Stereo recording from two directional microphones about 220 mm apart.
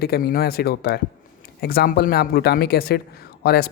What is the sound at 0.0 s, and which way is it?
Speech, 40° left (ahead or behind).